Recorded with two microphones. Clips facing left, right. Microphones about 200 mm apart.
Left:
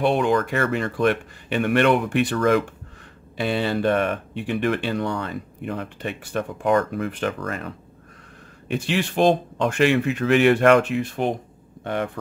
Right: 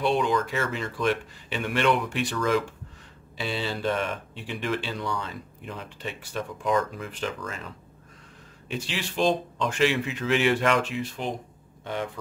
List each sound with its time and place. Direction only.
0.0 s speech: 55° left (ahead or behind)